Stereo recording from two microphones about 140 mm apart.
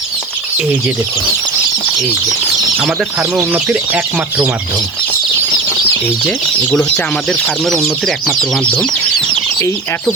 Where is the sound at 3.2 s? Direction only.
5° right (ahead or behind).